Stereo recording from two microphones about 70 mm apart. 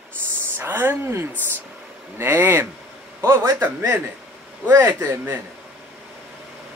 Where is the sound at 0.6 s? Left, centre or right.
Right.